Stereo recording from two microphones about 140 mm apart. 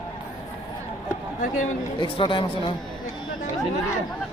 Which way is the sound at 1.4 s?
65° left (ahead or behind).